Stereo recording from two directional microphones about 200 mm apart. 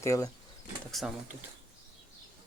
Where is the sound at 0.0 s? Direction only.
15° left (ahead or behind).